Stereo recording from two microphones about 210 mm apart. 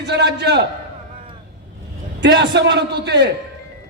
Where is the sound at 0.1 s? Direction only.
55° right (ahead or behind).